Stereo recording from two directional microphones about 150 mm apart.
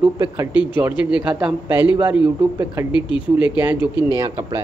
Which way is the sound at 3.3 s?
10° right (ahead or behind).